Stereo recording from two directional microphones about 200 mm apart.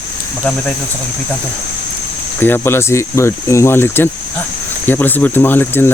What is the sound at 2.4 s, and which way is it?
Speech, 10° left (ahead or behind).